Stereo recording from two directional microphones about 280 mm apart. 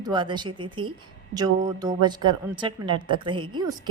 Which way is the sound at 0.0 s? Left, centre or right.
Centre.